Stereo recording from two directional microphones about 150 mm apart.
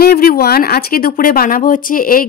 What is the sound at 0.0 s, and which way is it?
Speech, 80° left.